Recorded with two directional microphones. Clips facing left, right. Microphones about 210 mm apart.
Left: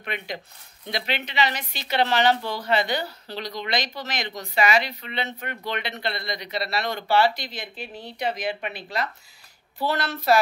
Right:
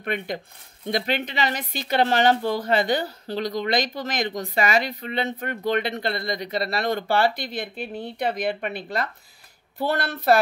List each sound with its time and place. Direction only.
0.0 s a woman's voice: 50° right (ahead or behind)